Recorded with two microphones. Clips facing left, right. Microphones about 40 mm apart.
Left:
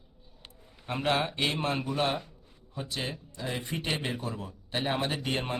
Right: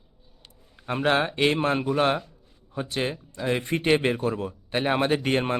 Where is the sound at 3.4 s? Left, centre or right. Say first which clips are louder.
Right 9 dB; right.